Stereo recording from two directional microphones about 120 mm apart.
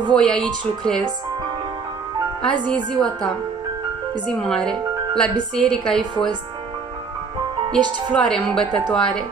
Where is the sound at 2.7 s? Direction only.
40° right (ahead or behind).